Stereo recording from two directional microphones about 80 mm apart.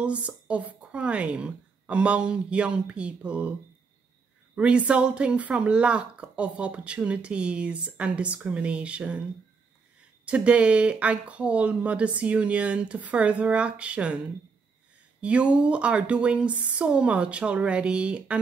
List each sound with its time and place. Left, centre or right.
0.0 s speech: centre
4.6 s speech: centre
10.2 s speech: centre
15.1 s speech: centre